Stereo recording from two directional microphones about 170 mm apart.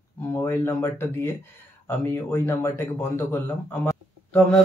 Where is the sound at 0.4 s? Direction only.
15° left (ahead or behind).